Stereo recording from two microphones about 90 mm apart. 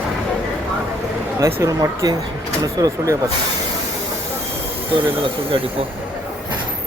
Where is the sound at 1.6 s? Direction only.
35° right (ahead or behind).